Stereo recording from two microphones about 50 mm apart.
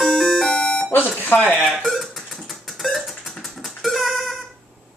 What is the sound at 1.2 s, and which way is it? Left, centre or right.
Speech, left.